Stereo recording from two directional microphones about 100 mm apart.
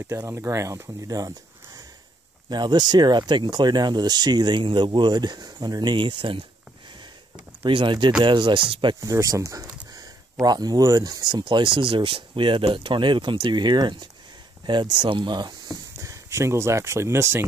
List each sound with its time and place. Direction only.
0.1 s speech: 30° right (ahead or behind)
2.5 s speech: 45° right (ahead or behind)
7.6 s speech: 55° right (ahead or behind)
9.0 s speech: 35° right (ahead or behind)
11.3 s speech: 50° right (ahead or behind)
16.0 s speech: 30° right (ahead or behind)